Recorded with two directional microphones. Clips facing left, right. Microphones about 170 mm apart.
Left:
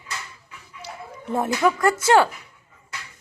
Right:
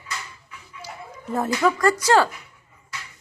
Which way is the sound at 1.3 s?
20° left (ahead or behind).